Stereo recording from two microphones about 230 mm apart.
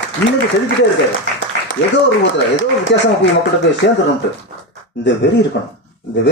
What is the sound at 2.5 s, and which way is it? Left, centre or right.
Speech, left.